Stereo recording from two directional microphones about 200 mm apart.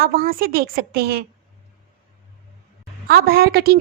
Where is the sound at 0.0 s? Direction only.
50° right (ahead or behind).